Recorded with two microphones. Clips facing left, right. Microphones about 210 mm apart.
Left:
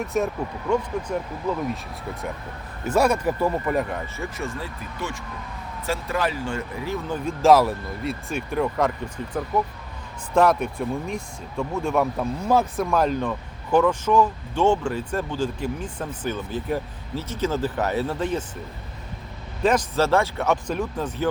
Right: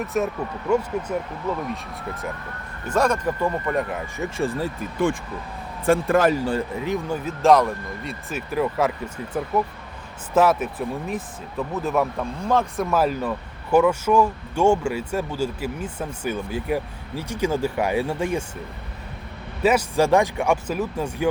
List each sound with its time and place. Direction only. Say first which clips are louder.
0.0 s speech: even; centre (ahead or behind)
2.8 s speech: left 1 dB; 10° left (ahead or behind)
4.2 s speech: right 6 dB; 30° right (ahead or behind)
6.7 s speech: right 3 dB; 15° right (ahead or behind)
7.3 s speech: left 1 dB; 5° left (ahead or behind)
19.6 s speech: right 2 dB; 10° right (ahead or behind)